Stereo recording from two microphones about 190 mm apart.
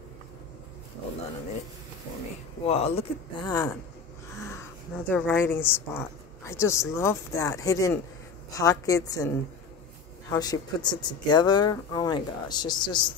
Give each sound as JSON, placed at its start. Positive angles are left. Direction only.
{"t": 2.6, "sound": "speech", "side_deg": 30}
{"t": 5.0, "sound": "speech", "side_deg": 10}
{"t": 10.3, "sound": "speech", "side_deg": 20}